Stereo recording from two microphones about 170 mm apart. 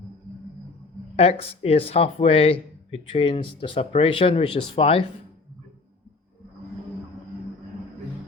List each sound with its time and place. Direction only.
1.1 s speech: 35° left (ahead or behind)